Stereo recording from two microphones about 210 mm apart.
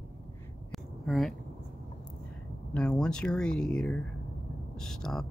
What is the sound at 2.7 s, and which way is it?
Speech, 5° left (ahead or behind).